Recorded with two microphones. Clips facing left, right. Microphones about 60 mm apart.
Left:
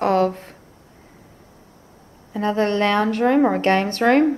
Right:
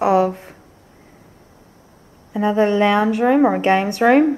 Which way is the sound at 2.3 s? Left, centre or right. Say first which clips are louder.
Right 4 dB; centre.